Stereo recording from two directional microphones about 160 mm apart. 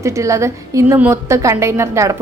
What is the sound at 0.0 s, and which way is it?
A woman's voice, 20° right (ahead or behind).